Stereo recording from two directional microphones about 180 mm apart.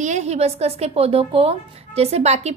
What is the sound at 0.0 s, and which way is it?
A woman's voice, 40° right (ahead or behind).